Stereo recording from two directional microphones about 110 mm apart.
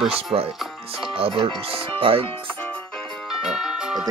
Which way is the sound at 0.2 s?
60° right (ahead or behind).